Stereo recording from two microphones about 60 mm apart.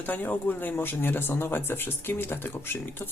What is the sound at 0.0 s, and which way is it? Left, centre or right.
Speech, left.